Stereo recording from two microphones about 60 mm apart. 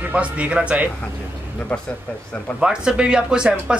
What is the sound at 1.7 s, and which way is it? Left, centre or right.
Speech, left.